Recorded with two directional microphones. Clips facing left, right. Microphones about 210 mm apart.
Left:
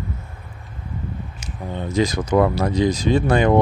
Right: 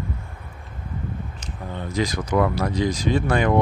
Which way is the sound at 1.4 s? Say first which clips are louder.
Left 7 dB; 20° left (ahead or behind).